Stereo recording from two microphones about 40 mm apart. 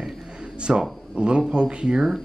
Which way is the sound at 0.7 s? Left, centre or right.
Right.